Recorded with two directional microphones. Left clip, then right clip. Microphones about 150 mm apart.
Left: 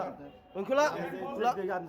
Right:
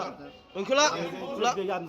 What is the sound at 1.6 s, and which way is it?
Speech, 50° right (ahead or behind).